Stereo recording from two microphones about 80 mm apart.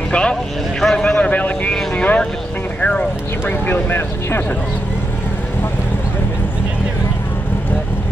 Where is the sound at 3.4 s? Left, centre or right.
Left.